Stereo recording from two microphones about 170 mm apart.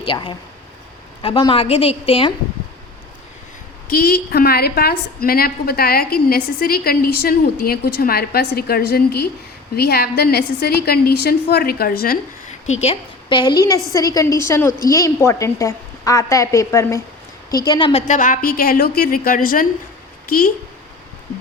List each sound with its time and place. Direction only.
0.0 s a woman's voice: 30° left (ahead or behind)
3.8 s a woman's voice: 60° left (ahead or behind)
12.6 s a woman's voice: 40° left (ahead or behind)
18.1 s a woman's voice: 50° left (ahead or behind)